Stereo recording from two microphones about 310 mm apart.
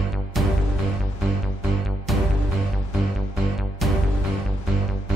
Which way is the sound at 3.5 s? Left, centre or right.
Centre.